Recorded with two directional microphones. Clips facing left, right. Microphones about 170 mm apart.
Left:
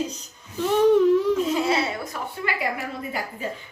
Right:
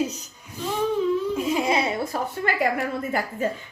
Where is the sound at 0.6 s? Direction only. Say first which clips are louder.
Left 7 dB; 70° left (ahead or behind).